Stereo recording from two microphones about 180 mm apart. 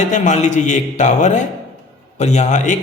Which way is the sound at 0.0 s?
40° left (ahead or behind).